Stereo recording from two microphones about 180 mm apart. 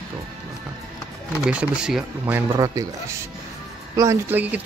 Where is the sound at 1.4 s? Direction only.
5° right (ahead or behind).